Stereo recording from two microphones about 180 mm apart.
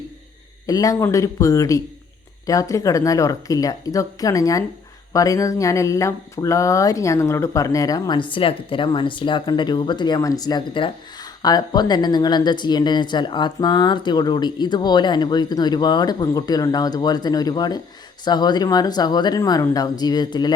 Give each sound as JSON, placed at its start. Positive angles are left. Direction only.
{"t": 0.7, "sound": "speech", "side_deg": 20}